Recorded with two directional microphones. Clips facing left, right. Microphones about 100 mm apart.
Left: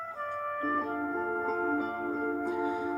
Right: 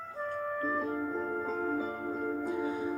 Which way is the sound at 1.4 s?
35° left (ahead or behind).